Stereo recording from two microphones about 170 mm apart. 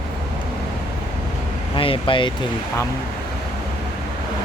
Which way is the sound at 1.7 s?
30° left (ahead or behind).